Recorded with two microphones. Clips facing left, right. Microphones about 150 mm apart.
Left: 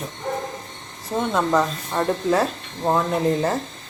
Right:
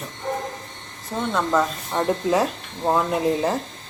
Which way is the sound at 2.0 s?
15° right (ahead or behind).